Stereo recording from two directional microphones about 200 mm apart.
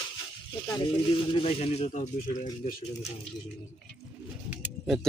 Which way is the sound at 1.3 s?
30° left (ahead or behind).